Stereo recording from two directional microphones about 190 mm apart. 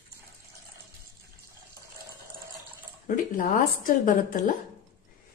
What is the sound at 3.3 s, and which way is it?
A woman's voice, 45° left (ahead or behind).